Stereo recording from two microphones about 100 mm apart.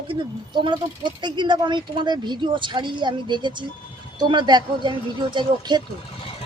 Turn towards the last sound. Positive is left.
turn(degrees=-45)  # may be behind; listen again after turning